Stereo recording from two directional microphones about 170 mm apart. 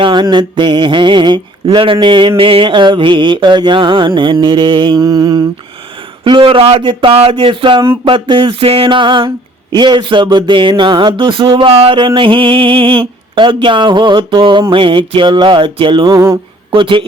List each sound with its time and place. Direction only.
0.0 s speech: 25° right (ahead or behind)
16.7 s speech: 30° right (ahead or behind)